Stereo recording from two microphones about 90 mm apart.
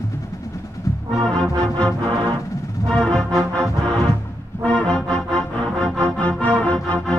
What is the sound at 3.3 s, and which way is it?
Music, 35° right (ahead or behind).